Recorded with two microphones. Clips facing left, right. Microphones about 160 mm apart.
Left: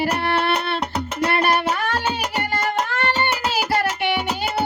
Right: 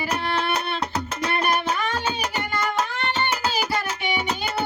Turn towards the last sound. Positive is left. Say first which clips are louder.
# left 3 dB
turn(degrees=60)  # may be behind; listen again after turning